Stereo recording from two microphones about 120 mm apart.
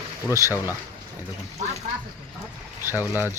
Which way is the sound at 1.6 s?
90° right.